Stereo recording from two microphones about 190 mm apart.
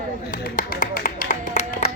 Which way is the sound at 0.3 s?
50° left (ahead or behind).